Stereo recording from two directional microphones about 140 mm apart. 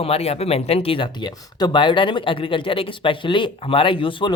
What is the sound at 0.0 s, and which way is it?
Speech, 45° left (ahead or behind).